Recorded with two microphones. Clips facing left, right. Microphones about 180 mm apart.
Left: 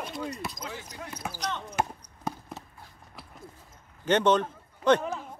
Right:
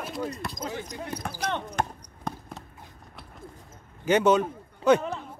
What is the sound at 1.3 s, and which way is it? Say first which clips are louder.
Speech: right 4 dB; 55° right (ahead or behind).